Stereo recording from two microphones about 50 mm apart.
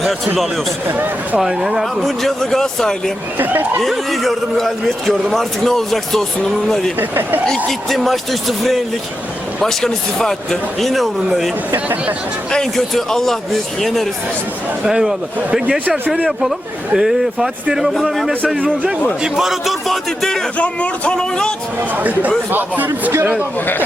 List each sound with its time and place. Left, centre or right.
0.9 s speech: right
1.4 s speech: centre
3.3 s speech: right
3.8 s speech: centre
7.0 s speech: right
7.4 s speech: centre
12.7 s speech: centre
14.8 s speech: centre
16.0 s speech: right
16.9 s speech: centre
19.9 s speech: centre
20.6 s a man's voice: left
21.2 s speech: centre
21.9 s speech: right